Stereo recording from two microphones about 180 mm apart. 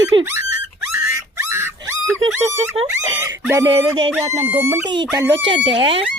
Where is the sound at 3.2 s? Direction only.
15° right (ahead or behind).